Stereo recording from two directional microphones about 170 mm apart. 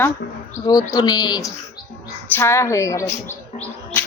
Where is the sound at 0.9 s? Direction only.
25° left (ahead or behind).